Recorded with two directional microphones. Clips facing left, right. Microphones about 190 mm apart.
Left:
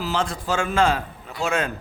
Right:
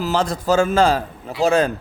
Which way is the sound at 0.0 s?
40° right (ahead or behind).